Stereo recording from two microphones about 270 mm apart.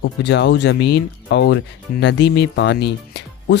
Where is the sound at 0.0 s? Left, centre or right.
Left.